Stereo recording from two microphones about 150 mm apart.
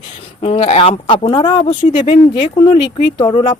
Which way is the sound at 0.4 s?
40° left (ahead or behind).